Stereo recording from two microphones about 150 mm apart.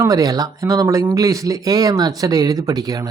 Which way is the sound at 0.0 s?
25° right (ahead or behind).